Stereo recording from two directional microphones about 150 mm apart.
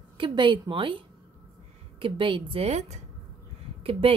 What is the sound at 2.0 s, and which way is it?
A woman's voice, 35° right (ahead or behind).